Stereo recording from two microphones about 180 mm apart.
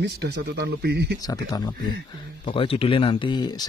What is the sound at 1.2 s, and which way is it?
Speech, 20° left (ahead or behind).